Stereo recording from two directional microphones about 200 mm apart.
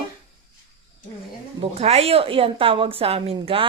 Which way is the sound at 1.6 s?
30° right (ahead or behind).